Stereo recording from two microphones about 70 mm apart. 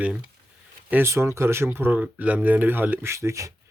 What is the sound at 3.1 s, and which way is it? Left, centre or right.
Speech, right.